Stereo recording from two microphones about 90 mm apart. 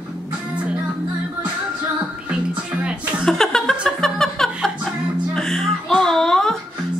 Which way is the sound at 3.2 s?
5° left (ahead or behind).